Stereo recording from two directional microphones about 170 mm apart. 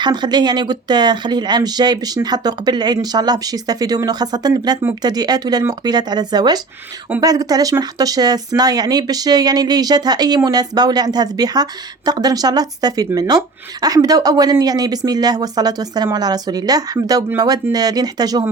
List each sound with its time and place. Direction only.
0.0 s speech: 25° right (ahead or behind)